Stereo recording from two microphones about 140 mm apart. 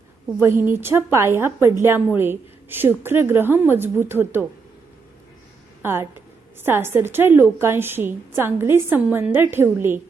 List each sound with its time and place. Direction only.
0.3 s a woman's voice: 15° right (ahead or behind)
5.8 s a woman's voice: 15° right (ahead or behind)